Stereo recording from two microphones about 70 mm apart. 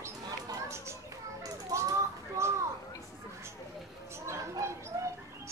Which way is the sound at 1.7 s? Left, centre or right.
Right.